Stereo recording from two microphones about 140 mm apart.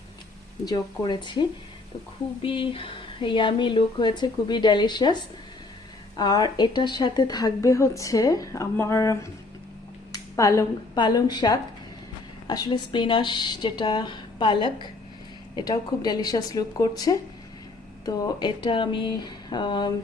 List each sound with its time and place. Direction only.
0.6 s a woman's voice: 30° left (ahead or behind)
10.1 s a sound: 20° left (ahead or behind)
10.9 s a woman's voice: 30° left (ahead or behind)